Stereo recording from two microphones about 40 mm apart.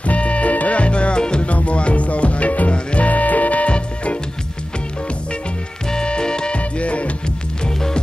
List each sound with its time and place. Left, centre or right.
0.0 s music: left
1.5 s music: left
3.1 s music: left
5.9 s music: left
6.6 s music: left
7.6 s music: left